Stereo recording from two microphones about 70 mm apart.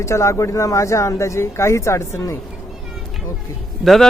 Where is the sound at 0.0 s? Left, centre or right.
Left.